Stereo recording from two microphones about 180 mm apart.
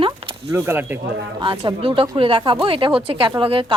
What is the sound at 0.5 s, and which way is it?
Speech, 15° right (ahead or behind).